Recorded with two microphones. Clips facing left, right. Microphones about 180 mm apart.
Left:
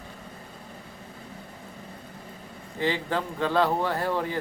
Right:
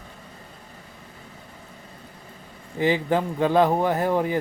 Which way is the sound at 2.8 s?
15° right (ahead or behind).